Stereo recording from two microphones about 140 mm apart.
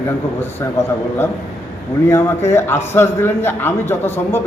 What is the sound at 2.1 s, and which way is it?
A man's voice, 20° left (ahead or behind).